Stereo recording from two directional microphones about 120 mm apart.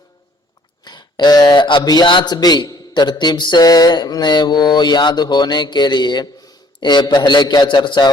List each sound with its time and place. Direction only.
0.9 s speech: 35° left (ahead or behind)